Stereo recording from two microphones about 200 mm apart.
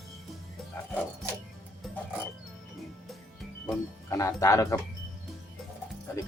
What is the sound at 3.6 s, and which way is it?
Speech, 15° left (ahead or behind).